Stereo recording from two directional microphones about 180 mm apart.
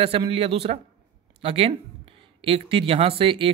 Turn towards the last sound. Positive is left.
turn(degrees=-30)  # may be behind; listen again after turning